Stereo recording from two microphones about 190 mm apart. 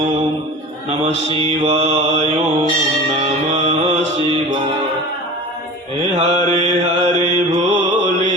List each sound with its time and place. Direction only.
1.4 s mantra: 35° right (ahead or behind)
3.5 s mantra: 30° right (ahead or behind)
6.1 s mantra: 30° right (ahead or behind)